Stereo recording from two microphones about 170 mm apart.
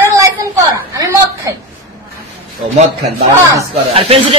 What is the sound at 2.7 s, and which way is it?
A man's voice, 40° right (ahead or behind).